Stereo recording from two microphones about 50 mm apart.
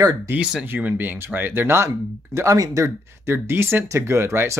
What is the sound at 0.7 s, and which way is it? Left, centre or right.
Speech, right.